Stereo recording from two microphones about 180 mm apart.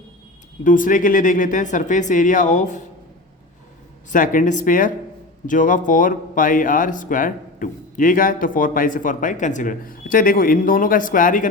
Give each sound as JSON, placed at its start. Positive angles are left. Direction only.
{"t": 0.6, "sound": "speech", "side_deg": 45}
{"t": 4.1, "sound": "speech", "side_deg": 50}